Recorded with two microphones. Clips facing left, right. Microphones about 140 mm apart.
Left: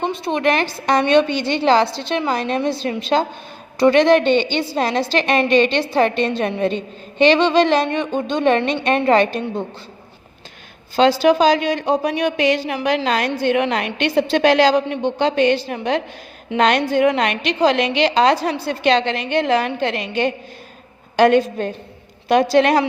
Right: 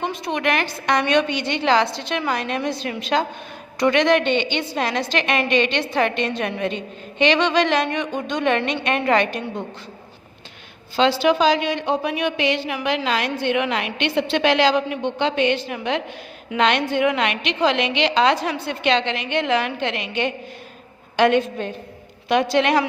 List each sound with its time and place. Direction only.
0.0 s a woman's voice: 30° left (ahead or behind)
10.9 s a woman's voice: 40° left (ahead or behind)